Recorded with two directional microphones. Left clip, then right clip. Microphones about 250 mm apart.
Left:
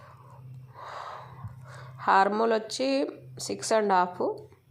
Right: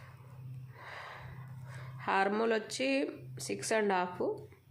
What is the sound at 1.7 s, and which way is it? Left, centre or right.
Speech, centre.